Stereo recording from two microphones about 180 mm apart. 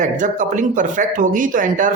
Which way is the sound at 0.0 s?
45° right (ahead or behind).